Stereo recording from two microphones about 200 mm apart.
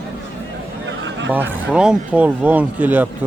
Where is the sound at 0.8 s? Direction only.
70° right (ahead or behind).